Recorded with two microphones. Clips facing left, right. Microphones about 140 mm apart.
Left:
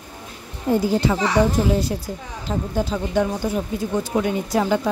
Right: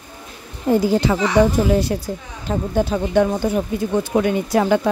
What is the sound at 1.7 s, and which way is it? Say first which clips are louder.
Speech: right 4 dB; 65° right (ahead or behind).